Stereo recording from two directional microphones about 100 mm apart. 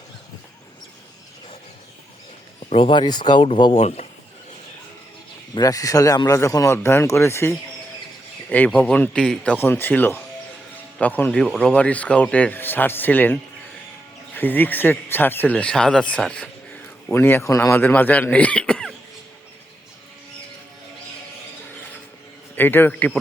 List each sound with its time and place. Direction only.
2.6 s speech: 65° left (ahead or behind); by 4.0 s 85° left
5.5 s speech: 35° left (ahead or behind); by 9.6 s 10° left (ahead or behind)
9.6 s speech: 20° left (ahead or behind)
15.5 s speech: 10° left (ahead or behind)
17.1 s speech: 20° left (ahead or behind)
17.7 s speech: 20° left (ahead or behind)
22.5 s speech: 20° left (ahead or behind)